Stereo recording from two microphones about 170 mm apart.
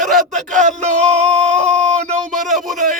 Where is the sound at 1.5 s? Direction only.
5° left (ahead or behind).